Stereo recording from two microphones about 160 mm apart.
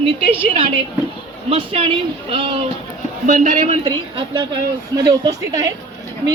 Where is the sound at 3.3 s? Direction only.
55° right (ahead or behind).